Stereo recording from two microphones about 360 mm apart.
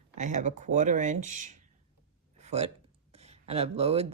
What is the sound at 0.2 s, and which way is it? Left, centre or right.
Speech, centre.